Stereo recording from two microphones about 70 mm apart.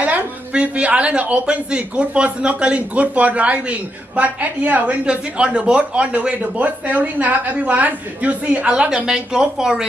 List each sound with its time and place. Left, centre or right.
0.0 s a woman's voice: centre